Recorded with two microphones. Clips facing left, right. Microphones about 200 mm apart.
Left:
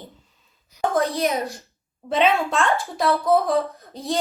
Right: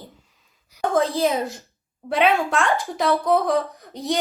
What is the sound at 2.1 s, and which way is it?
Speech, 15° right (ahead or behind).